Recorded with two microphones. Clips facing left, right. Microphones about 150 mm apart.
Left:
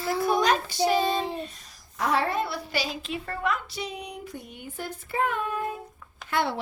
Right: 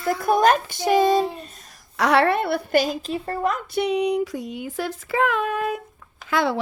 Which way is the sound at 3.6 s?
65° right (ahead or behind).